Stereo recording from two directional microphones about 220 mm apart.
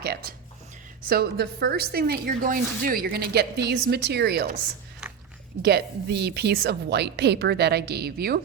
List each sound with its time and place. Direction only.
0.0 s a woman's voice: 45° right (ahead or behind)
5.6 s a woman's voice: 50° right (ahead or behind)